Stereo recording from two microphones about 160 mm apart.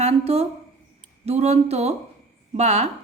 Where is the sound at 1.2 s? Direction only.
40° right (ahead or behind).